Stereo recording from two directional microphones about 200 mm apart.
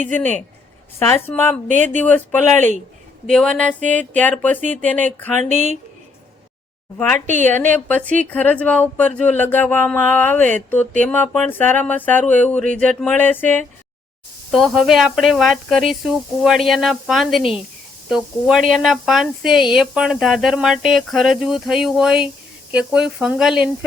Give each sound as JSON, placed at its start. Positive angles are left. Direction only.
{"t": 0.2, "sound": "speech", "side_deg": 10}
{"t": 1.6, "sound": "speech", "side_deg": -40}
{"t": 2.0, "sound": "speech", "side_deg": 10}
{"t": 5.4, "sound": "speech", "side_deg": -35}
{"t": 7.4, "sound": "speech", "side_deg": 10}